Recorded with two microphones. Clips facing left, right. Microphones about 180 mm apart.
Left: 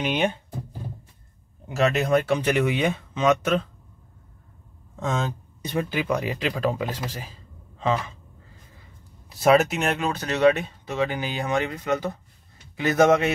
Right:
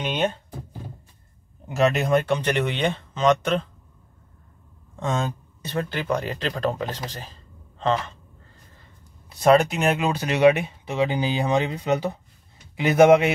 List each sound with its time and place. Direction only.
0.0 s speech: 10° left (ahead or behind)
1.8 s speech: centre (ahead or behind)
5.0 s speech: centre (ahead or behind)
5.6 s a man's voice: 15° left (ahead or behind)
9.3 s speech: 5° left (ahead or behind); by 13.3 s 15° right (ahead or behind)